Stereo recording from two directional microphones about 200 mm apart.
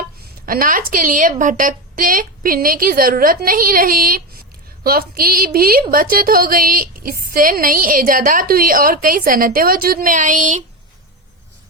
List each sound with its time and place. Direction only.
0.4 s a woman's voice: 45° right (ahead or behind)